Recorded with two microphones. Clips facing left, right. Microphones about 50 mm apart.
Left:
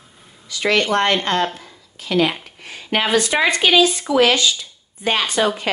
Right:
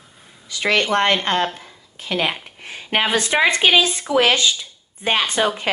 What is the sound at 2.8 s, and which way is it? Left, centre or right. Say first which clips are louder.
Speech: left 1 dB; right.